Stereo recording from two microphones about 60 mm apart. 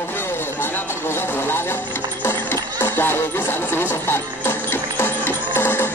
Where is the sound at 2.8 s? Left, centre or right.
Left.